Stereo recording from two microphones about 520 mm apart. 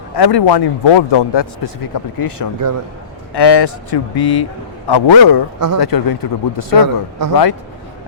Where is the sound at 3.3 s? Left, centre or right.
Left.